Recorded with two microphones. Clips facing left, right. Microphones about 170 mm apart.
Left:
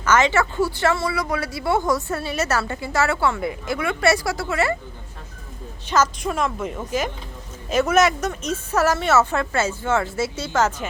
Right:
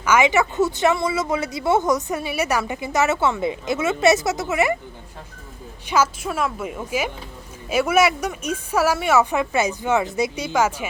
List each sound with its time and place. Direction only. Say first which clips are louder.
0.0 s speech: right 1 dB; 10° right (ahead or behind)
5.9 s speech: even; 10° right (ahead or behind)